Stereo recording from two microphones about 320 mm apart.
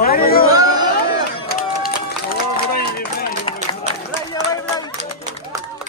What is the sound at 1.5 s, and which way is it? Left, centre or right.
Run, left.